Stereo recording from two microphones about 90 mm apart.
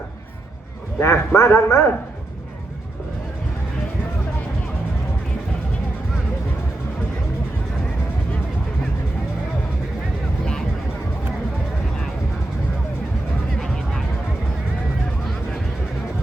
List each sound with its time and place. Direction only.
0.9 s a man's voice: 25° left (ahead or behind)
13.6 s music: 5° left (ahead or behind)